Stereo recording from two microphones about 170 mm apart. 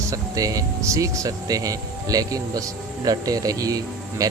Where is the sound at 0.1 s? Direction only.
20° right (ahead or behind).